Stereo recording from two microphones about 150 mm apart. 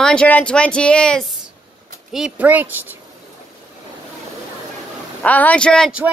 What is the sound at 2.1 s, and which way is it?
Speech, 5° right (ahead or behind).